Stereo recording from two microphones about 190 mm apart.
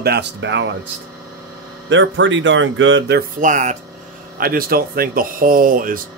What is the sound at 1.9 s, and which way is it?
Speech, 80° right.